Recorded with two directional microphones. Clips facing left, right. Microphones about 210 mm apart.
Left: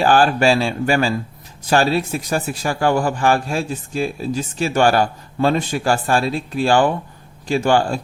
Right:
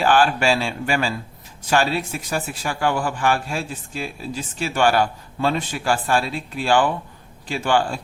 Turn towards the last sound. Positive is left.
turn(degrees=45)  # may be behind; listen again after turning